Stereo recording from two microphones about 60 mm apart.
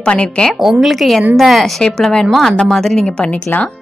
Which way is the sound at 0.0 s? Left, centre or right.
Centre.